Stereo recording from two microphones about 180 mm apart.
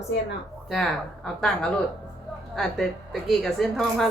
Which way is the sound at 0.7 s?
Centre (ahead or behind).